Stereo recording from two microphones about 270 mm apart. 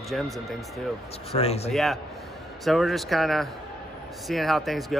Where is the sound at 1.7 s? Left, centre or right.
Centre.